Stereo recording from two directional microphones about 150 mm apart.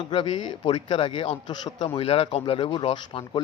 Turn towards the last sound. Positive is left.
turn(degrees=35)  # may be behind; listen again after turning